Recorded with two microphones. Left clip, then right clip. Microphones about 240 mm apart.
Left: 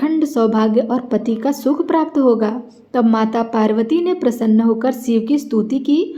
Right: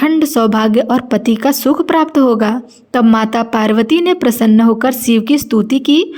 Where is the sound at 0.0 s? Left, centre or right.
Right.